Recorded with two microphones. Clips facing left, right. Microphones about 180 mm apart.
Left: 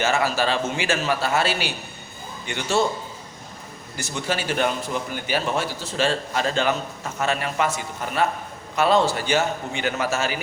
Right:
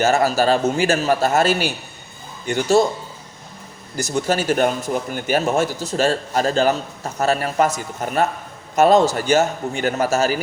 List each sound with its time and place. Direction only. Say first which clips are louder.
0.0 s a man's voice: right 5 dB; 40° right (ahead or behind)
3.9 s a man's voice: right 7 dB; 40° right (ahead or behind)